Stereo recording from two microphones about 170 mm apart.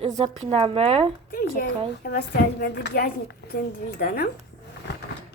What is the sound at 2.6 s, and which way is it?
A woman's voice, 70° left (ahead or behind).